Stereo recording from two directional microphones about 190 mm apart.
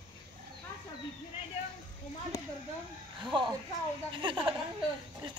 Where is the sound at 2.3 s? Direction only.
15° left (ahead or behind).